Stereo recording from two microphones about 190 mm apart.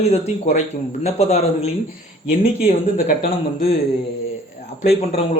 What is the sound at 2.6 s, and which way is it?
Speech, 50° left (ahead or behind).